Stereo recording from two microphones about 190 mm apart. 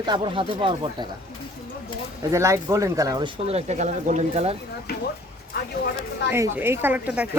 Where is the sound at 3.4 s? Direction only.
35° right (ahead or behind).